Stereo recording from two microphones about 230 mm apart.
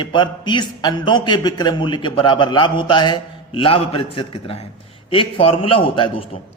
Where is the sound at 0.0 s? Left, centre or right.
Centre.